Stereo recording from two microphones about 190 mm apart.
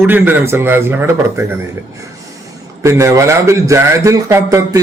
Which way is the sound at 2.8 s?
15° right (ahead or behind).